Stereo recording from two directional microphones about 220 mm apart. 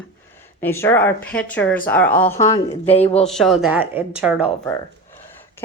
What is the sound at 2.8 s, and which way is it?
Speech, 30° left (ahead or behind).